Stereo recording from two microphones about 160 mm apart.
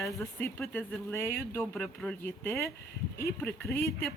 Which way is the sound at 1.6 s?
Centre (ahead or behind).